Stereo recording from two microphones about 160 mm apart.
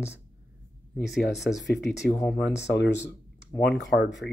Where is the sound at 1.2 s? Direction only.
90° left.